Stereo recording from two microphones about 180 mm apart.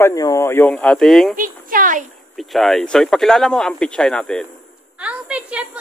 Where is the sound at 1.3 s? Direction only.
50° right (ahead or behind).